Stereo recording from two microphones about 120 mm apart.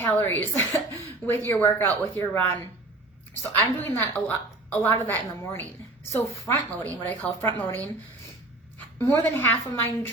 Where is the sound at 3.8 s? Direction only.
20° left (ahead or behind).